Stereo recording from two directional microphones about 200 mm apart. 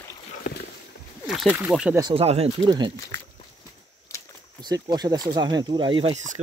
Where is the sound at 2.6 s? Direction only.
20° right (ahead or behind).